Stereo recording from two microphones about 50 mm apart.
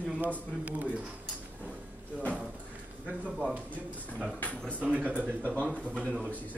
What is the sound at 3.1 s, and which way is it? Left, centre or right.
Speech, right.